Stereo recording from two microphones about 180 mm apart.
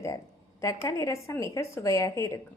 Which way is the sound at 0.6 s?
15° left (ahead or behind).